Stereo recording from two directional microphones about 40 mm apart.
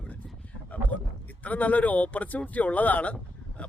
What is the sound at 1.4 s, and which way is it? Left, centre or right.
Speech, left.